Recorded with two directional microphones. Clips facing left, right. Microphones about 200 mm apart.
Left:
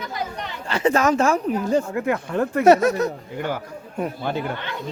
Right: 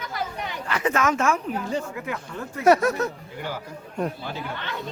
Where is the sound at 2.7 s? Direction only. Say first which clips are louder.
Left 3 dB; 20° left (ahead or behind).